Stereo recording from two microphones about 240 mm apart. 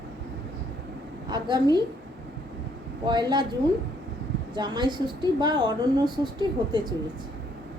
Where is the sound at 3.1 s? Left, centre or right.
Centre.